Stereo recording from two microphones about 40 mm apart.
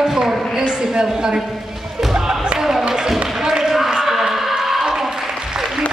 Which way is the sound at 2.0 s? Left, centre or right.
Centre.